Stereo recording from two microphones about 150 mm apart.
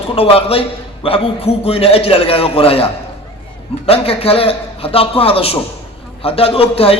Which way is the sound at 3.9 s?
40° left (ahead or behind).